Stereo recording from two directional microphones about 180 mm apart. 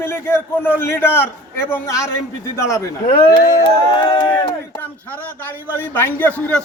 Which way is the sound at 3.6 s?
25° left (ahead or behind).